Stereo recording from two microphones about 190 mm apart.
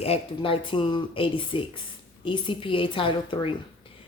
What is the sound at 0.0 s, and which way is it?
Speech, 30° left (ahead or behind).